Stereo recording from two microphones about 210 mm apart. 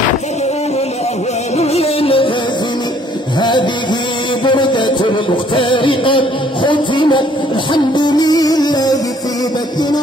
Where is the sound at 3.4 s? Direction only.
20° left (ahead or behind).